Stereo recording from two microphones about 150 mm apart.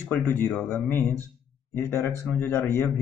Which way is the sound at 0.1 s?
15° left (ahead or behind).